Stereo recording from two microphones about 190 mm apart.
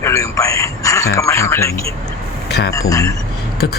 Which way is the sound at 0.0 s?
15° left (ahead or behind).